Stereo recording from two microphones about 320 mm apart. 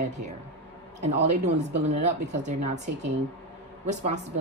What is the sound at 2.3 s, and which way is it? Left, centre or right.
Speech, right.